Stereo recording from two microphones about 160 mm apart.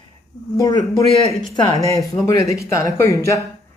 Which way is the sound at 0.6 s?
25° left (ahead or behind).